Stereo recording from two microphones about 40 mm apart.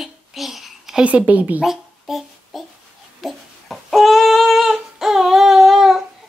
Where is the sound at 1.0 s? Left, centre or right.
Right.